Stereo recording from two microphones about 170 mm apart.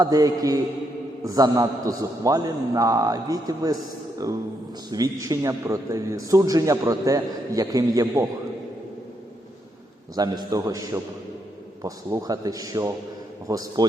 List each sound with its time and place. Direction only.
0.0 s a man's voice: 20° right (ahead or behind)
10.2 s a man's voice: 25° right (ahead or behind)